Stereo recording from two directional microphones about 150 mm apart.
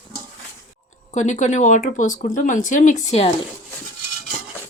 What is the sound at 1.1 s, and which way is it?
Speech, 50° left (ahead or behind).